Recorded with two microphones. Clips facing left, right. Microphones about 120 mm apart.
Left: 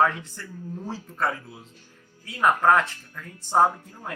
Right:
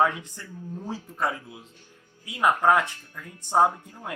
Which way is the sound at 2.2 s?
15° right (ahead or behind).